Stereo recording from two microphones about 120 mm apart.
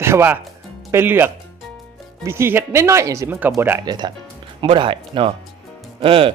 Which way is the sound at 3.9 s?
35° right (ahead or behind).